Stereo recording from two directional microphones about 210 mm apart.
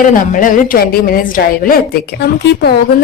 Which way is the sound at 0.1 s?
40° left (ahead or behind).